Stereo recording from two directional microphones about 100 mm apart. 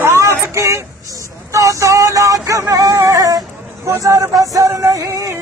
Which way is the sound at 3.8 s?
30° right (ahead or behind).